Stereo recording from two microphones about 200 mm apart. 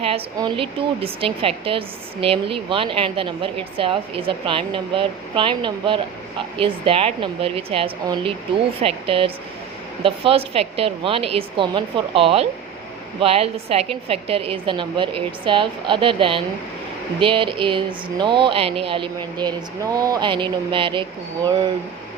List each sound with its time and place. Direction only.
0.3 s speech: 25° right (ahead or behind)